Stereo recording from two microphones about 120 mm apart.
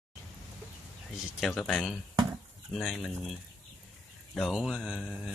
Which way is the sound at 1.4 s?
Centre (ahead or behind).